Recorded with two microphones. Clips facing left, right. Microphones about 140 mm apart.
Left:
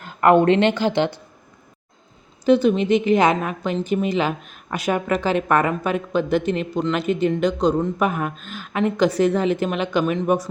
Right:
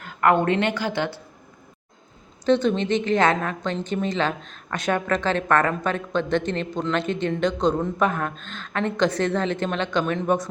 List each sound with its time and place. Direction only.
0.0 s speech: 20° left (ahead or behind)
2.4 s a woman's voice: 10° left (ahead or behind)